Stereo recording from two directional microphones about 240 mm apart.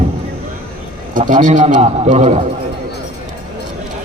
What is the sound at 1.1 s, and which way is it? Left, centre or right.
A man's voice, right.